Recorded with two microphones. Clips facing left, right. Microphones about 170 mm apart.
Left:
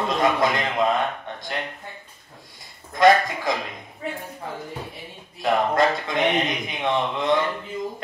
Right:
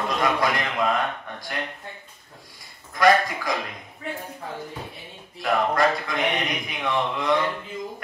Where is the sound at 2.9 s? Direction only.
25° left (ahead or behind).